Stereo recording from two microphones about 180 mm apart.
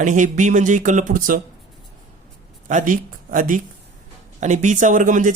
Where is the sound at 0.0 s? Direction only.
45° right (ahead or behind).